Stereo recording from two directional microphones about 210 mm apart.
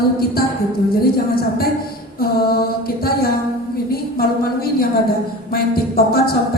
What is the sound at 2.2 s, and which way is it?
A woman's voice, 45° left (ahead or behind).